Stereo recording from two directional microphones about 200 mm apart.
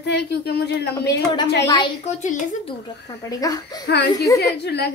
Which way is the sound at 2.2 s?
35° left (ahead or behind).